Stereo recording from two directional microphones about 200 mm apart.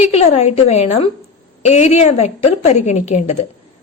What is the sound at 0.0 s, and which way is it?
A woman's voice, 30° left (ahead or behind).